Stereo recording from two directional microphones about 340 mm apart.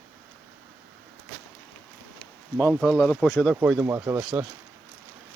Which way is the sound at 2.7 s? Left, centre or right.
Centre.